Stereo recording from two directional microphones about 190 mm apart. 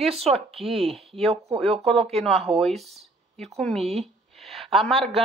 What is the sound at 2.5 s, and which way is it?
Speech, centre (ahead or behind).